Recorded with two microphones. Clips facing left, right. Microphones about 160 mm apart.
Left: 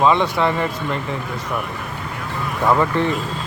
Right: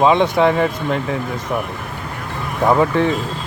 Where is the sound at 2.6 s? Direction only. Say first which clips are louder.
Right 3 dB; 15° right (ahead or behind).